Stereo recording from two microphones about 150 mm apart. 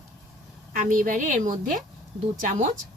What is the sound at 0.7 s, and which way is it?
A woman's voice, 65° right (ahead or behind).